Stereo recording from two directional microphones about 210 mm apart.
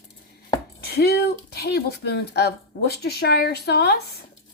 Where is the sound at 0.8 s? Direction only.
50° left (ahead or behind).